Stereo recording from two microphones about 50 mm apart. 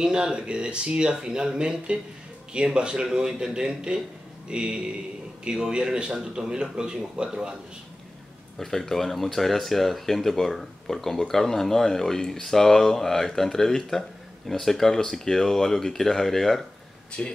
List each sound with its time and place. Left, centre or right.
0.0 s a man's voice: centre
8.5 s speech: centre
17.2 s speech: left